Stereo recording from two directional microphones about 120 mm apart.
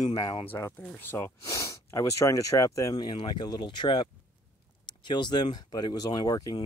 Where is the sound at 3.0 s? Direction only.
40° left (ahead or behind).